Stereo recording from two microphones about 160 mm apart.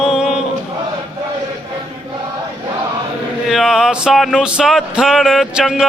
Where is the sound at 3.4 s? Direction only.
Centre (ahead or behind).